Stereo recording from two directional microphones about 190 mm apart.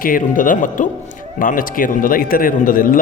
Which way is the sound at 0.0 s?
45° left (ahead or behind).